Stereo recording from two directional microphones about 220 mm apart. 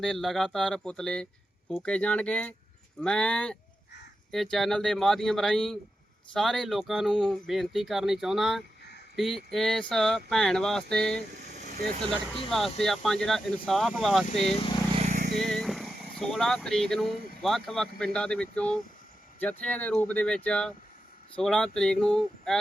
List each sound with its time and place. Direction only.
0.0 s speech: centre (ahead or behind)
11.3 s vehicle: 30° right (ahead or behind)
12.5 s speech: centre (ahead or behind)
14.4 s speech: 25° left (ahead or behind)
15.0 s vehicle: 35° right (ahead or behind)
15.4 s vehicle: centre (ahead or behind)
19.4 s speech: 5° left (ahead or behind)